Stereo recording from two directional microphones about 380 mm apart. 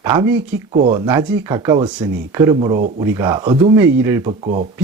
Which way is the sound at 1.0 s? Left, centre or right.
Centre.